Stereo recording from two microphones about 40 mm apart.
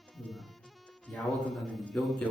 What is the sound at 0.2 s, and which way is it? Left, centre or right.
Music, centre.